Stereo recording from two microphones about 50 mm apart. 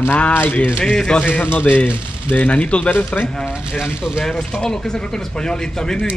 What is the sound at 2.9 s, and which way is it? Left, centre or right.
Speech, left.